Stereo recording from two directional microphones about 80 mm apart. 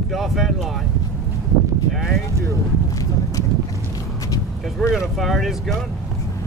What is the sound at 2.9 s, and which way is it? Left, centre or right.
Horse, left.